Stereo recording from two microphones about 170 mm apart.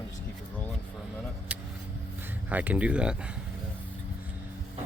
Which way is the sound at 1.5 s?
10° right (ahead or behind).